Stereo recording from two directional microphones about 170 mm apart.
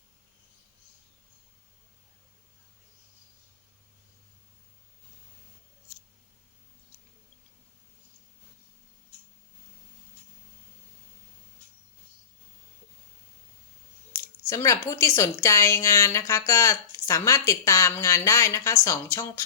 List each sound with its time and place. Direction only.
14.2 s speech: 15° left (ahead or behind)